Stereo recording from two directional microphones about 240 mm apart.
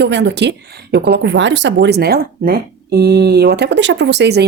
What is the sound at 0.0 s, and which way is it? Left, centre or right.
Speech, right.